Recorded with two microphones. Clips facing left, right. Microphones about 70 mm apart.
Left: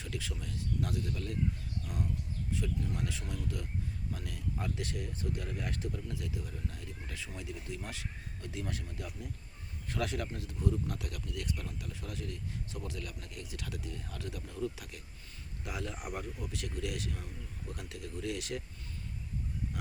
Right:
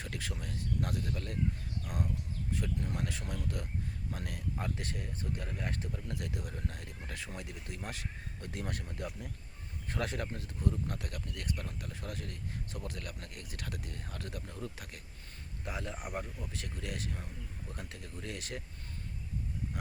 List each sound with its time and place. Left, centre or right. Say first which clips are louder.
0.0 s speech: even; right
2.5 s speech: even; right
4.5 s speech: left 2 dB; right
6.1 s speech: even; right
15.6 s speech: even; right